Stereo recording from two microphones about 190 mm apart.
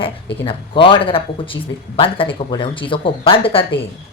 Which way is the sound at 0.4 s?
25° left (ahead or behind).